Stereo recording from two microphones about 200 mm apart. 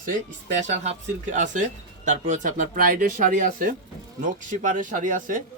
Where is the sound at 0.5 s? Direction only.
35° right (ahead or behind).